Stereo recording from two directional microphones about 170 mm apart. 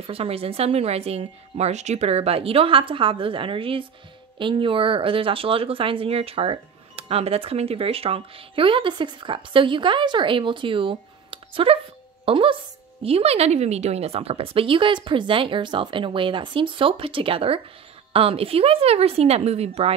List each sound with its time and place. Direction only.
0.0 s speech: 35° right (ahead or behind)